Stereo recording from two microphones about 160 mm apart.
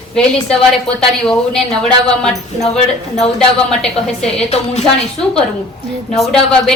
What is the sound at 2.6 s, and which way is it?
Speech, 40° left (ahead or behind).